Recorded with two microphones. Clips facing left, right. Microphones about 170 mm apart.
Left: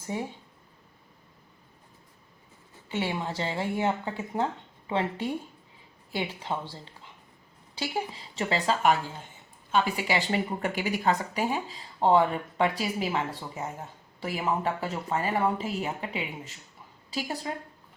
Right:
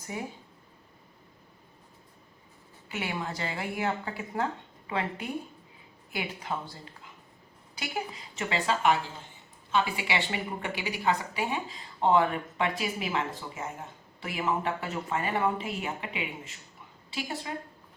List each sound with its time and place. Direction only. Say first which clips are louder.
0.0 s speech: left 4 dB; 25° left (ahead or behind)
2.9 s a woman's voice: left 4 dB; 25° left (ahead or behind)
14.2 s a woman's voice: left 1 dB; 35° left (ahead or behind)